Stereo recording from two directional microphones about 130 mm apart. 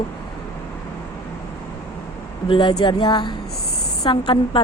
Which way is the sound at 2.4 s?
40° left (ahead or behind).